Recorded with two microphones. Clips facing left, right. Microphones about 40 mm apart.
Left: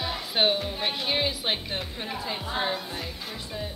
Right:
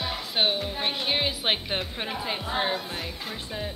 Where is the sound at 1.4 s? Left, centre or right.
Right.